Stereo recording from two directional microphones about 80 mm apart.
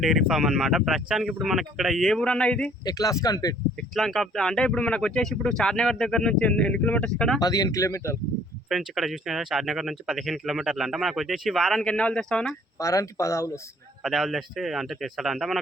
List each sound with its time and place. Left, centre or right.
0.0 s speech: centre
2.2 s speech: centre
2.8 s speech: left
3.8 s speech: centre
7.4 s speech: left
8.7 s speech: centre
12.8 s speech: left
14.0 s speech: centre